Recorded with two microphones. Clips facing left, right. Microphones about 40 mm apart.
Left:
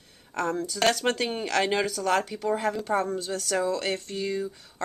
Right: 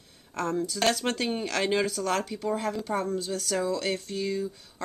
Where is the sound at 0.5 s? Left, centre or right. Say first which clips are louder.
Even; centre.